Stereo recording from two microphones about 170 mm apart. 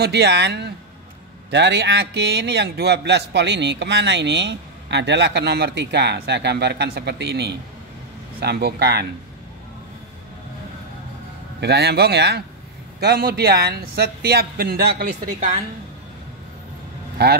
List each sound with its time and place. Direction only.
0.0 s speech: 80° right
1.5 s a man's voice: 90° right; by 9.0 s 70° right (ahead or behind)
11.6 s speech: 75° right (ahead or behind); by 15.5 s 55° right (ahead or behind)
17.2 s speech: 75° right (ahead or behind)